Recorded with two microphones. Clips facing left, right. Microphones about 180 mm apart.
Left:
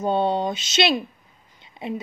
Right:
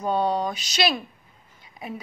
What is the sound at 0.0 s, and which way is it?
A woman's voice, 25° left (ahead or behind).